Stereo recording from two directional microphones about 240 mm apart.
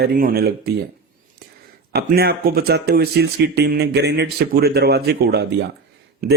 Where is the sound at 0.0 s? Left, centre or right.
Right.